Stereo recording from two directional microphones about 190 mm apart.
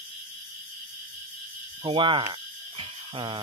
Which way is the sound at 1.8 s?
25° right (ahead or behind).